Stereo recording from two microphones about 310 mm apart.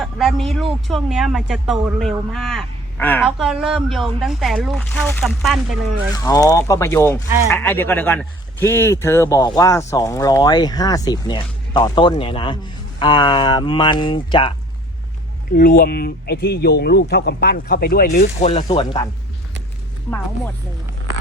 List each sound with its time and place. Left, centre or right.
0.0 s speech: centre
6.1 s speech: centre
15.5 s speech: left
20.1 s speech: centre